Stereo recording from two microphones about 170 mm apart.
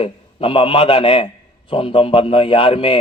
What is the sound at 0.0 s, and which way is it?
A man's voice, 30° left (ahead or behind).